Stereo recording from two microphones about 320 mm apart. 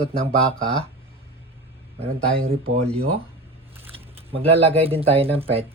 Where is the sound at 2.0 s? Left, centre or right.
Right.